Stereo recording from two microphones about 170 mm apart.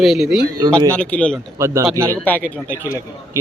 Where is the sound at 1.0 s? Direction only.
5° left (ahead or behind).